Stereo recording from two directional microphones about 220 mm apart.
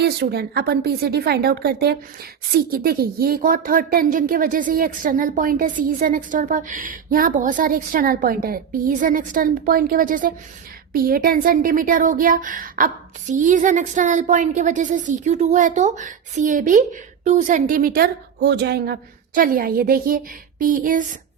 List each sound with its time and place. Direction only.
0.0 s a woman's voice: 50° right (ahead or behind)